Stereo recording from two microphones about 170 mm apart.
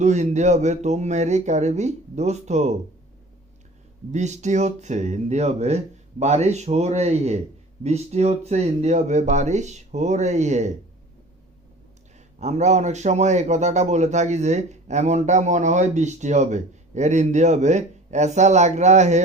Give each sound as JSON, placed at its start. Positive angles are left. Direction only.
{"t": 0.0, "sound": "speech", "side_deg": -45}
{"t": 4.1, "sound": "a man's voice", "side_deg": -45}
{"t": 12.4, "sound": "a man's voice", "side_deg": -40}